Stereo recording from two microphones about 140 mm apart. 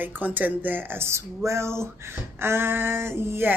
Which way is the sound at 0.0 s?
15° right (ahead or behind).